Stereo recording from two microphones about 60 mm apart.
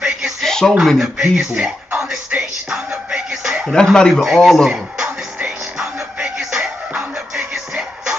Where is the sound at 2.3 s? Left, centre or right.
Centre.